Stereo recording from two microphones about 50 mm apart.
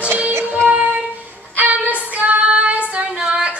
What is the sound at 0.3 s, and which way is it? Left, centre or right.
Music, right.